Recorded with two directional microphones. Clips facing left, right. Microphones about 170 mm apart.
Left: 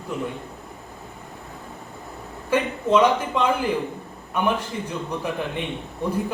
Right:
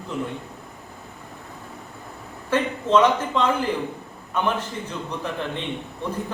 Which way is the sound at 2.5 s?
10° left (ahead or behind).